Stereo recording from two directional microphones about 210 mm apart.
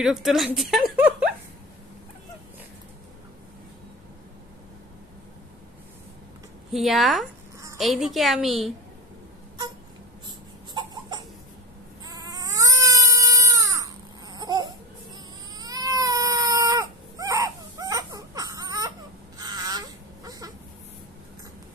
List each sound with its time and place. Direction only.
0.0 s a woman's voice: centre (ahead or behind)
6.7 s a woman's voice: centre (ahead or behind)
10.2 s crying: 20° right (ahead or behind)
12.1 s cat: 15° right (ahead or behind)
14.3 s baby cry: 20° right (ahead or behind)
20.2 s a sound: 15° right (ahead or behind)